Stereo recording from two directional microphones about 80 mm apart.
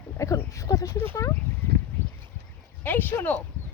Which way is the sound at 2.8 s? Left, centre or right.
Left.